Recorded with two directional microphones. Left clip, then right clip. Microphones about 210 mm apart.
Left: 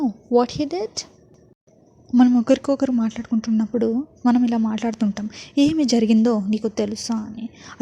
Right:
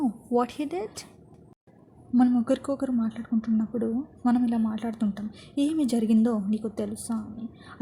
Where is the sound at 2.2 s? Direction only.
30° left (ahead or behind).